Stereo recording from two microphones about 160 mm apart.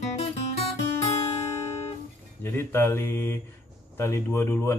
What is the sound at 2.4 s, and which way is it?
Speech, 15° left (ahead or behind).